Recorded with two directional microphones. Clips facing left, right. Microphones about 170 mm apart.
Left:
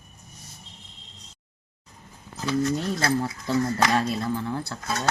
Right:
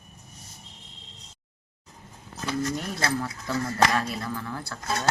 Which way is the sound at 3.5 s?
30° left (ahead or behind).